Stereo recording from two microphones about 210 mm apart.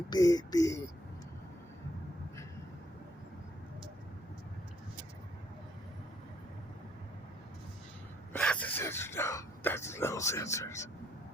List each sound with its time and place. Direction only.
0.1 s speech: 20° left (ahead or behind)
8.3 s speech: 5° left (ahead or behind)